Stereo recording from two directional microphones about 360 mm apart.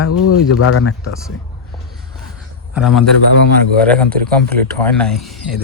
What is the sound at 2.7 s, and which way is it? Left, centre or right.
Speech, centre.